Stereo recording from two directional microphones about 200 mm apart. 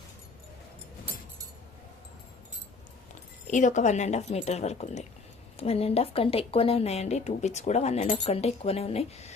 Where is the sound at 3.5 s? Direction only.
40° left (ahead or behind).